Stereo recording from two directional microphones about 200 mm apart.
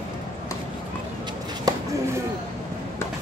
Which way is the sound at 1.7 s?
20° right (ahead or behind).